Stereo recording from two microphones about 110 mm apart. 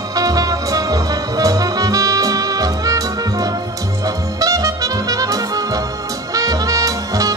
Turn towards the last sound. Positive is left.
turn(degrees=-30)  # may be behind; listen again after turning